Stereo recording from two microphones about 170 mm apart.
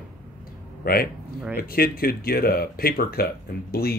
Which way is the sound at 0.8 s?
60° left (ahead or behind).